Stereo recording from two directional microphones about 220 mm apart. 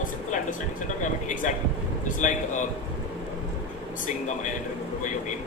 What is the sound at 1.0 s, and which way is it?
A man's voice, 35° left (ahead or behind).